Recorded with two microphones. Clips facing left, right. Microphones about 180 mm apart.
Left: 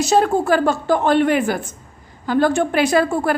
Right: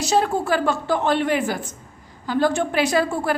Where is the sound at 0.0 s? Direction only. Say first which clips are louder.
Left 4 dB; 50° left (ahead or behind).